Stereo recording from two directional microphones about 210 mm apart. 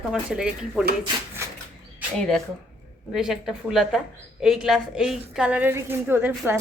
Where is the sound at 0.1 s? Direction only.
5° right (ahead or behind).